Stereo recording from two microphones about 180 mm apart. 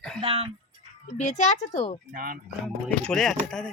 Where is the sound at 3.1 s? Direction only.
5° left (ahead or behind).